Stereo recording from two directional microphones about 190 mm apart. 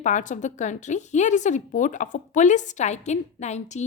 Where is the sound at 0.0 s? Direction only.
40° left (ahead or behind).